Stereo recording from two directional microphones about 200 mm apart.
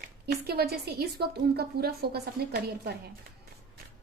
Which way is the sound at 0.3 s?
50° right (ahead or behind).